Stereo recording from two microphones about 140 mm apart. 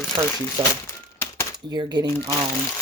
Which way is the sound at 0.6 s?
35° right (ahead or behind).